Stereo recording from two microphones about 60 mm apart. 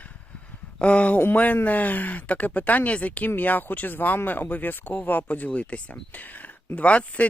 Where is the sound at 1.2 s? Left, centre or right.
Left.